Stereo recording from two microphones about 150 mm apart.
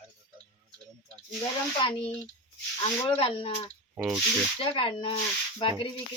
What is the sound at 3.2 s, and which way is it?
Speech, 40° left (ahead or behind).